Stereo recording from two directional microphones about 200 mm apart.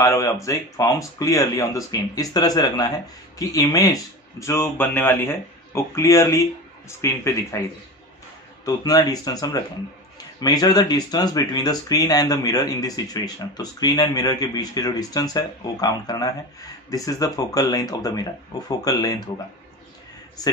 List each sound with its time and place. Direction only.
0.0 s speech: 15° left (ahead or behind)
8.6 s speech: 20° left (ahead or behind)